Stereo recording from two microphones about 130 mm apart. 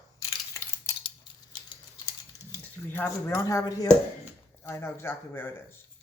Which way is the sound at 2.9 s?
20° left (ahead or behind).